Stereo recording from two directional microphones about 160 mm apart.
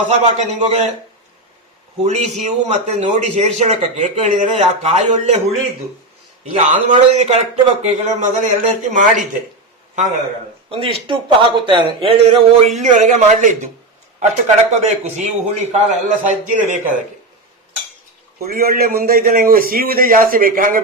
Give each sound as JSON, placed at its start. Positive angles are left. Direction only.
{"t": 0.3, "sound": "a man's voice", "side_deg": -45}
{"t": 2.0, "sound": "a man's voice", "side_deg": -45}
{"t": 6.6, "sound": "a man's voice", "side_deg": -50}
{"t": 10.7, "sound": "a man's voice", "side_deg": -35}
{"t": 18.4, "sound": "a man's voice", "side_deg": -65}